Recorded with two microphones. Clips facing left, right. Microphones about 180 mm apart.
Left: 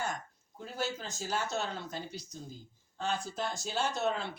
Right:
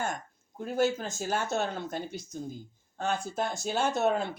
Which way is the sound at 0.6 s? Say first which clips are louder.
Right 9 dB; 50° right (ahead or behind).